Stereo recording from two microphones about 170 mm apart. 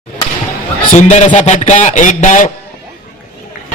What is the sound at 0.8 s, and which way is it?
Music, 45° left (ahead or behind).